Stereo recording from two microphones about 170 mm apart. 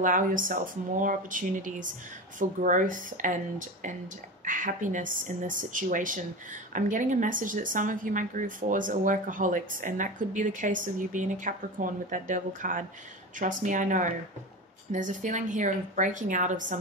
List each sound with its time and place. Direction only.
0.0 s speech: 50° right (ahead or behind)